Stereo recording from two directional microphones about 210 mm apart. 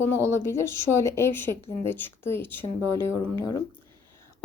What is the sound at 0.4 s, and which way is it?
Speech, 10° left (ahead or behind).